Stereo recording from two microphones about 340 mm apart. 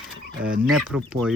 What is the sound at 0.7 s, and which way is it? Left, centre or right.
Speech, centre.